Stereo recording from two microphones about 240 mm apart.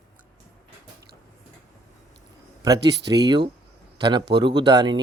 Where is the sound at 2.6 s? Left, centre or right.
Centre.